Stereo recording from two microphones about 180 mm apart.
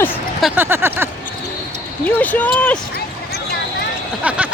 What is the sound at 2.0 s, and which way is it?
Speech, 10° left (ahead or behind).